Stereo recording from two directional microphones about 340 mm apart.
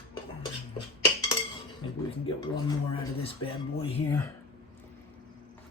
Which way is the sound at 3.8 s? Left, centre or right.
Centre.